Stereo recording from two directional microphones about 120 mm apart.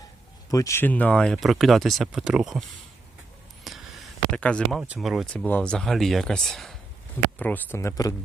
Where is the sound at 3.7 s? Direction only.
Centre (ahead or behind).